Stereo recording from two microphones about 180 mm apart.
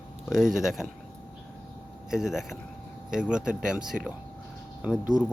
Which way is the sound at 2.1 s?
5° right (ahead or behind).